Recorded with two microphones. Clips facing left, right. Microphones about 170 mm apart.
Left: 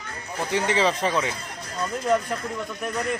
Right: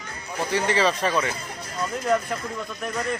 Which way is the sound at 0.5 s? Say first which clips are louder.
Even; 20° left (ahead or behind).